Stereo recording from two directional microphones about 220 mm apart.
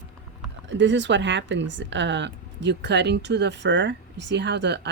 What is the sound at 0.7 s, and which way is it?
Speech, 55° right (ahead or behind).